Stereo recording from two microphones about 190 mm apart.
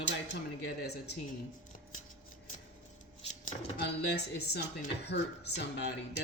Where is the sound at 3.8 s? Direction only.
60° left (ahead or behind).